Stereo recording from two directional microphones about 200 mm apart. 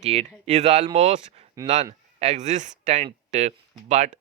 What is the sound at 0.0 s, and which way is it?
Speech, 30° right (ahead or behind).